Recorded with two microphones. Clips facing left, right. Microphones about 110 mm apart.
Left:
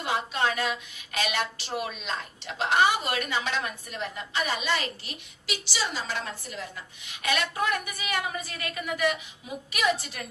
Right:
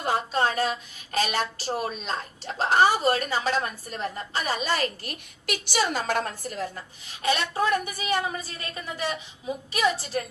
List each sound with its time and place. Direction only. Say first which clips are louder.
0.0 s a woman's voice: right 3 dB; 40° right (ahead or behind)